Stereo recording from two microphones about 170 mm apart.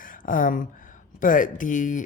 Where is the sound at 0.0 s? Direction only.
55° left (ahead or behind).